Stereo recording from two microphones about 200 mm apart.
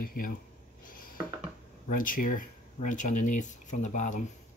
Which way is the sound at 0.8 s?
45° left (ahead or behind).